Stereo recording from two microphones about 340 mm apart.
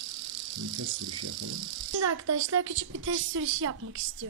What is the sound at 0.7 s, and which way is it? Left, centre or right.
Insect, right.